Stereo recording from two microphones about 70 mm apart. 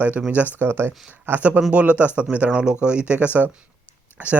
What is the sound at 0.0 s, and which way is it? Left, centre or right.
Speech, right.